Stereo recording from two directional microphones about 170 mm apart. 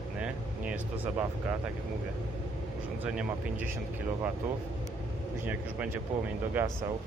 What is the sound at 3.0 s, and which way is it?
Speech, 5° right (ahead or behind).